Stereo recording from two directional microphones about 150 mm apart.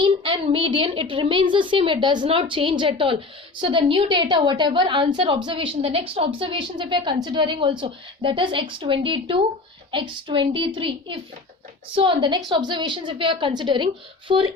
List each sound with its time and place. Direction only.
0.0 s a woman's voice: 35° right (ahead or behind)